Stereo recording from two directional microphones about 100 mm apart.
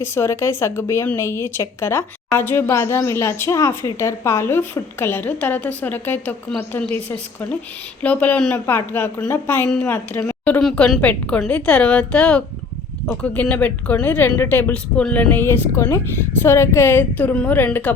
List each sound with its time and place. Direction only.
0.0 s a woman's voice: 25° left (ahead or behind)
8.0 s a woman's voice: 15° left (ahead or behind)
10.8 s a woman's voice: 5° left (ahead or behind); by 17.9 s 20° left (ahead or behind)